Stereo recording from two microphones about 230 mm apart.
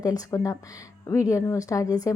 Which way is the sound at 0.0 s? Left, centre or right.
Centre.